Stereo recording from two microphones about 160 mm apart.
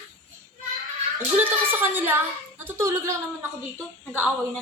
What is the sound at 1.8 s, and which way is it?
Speech, 15° right (ahead or behind).